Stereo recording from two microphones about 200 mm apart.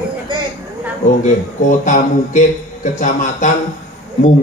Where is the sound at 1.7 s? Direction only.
40° left (ahead or behind).